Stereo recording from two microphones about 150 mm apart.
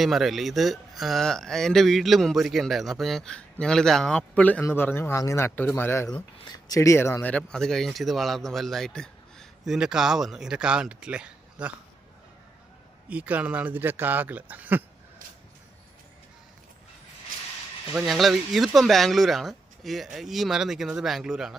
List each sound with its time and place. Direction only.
0.0 s speech: centre (ahead or behind)
13.1 s speech: 10° right (ahead or behind)
17.9 s speech: centre (ahead or behind)